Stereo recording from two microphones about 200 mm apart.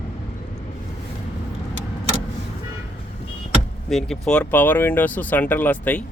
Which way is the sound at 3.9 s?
5° left (ahead or behind).